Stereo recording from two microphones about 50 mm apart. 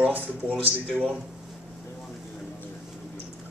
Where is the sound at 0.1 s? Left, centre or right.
Right.